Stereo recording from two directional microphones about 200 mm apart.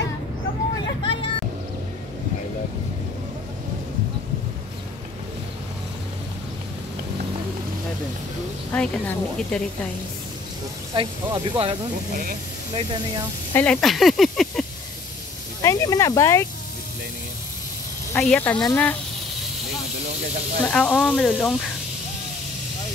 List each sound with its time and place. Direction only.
1.0 s vehicle: 25° left (ahead or behind)
8.7 s speech: 5° left (ahead or behind)
11.0 s speech: 20° right (ahead or behind)
12.1 s speech: 45° right (ahead or behind)
12.7 s speech: 25° right (ahead or behind)
13.5 s speech: 10° left (ahead or behind)
15.6 s speech: 15° left (ahead or behind)
18.1 s speech: 5° left (ahead or behind)
20.6 s speech: 5° left (ahead or behind)